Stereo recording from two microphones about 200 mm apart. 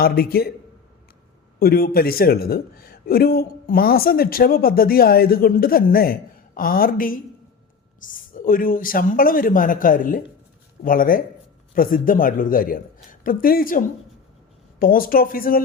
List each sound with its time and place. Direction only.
0.0 s a man's voice: 50° left (ahead or behind)
1.5 s a man's voice: 50° left (ahead or behind)